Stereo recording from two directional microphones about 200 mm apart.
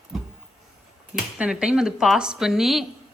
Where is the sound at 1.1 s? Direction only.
5° right (ahead or behind).